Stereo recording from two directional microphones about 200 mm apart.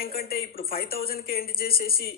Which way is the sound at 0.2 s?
50° left (ahead or behind).